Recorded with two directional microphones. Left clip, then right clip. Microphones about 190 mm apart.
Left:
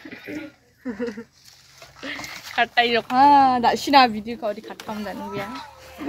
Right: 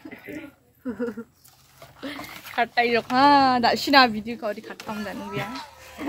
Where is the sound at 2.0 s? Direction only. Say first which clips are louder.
Left 3 dB; 20° right (ahead or behind).